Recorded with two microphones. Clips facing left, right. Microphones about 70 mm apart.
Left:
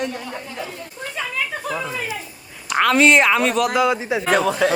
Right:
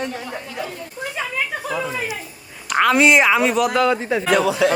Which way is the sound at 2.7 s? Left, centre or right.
Centre.